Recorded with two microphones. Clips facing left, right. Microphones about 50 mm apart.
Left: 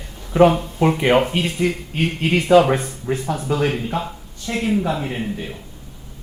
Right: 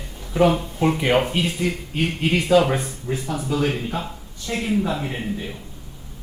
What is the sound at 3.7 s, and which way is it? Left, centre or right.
Speech, centre.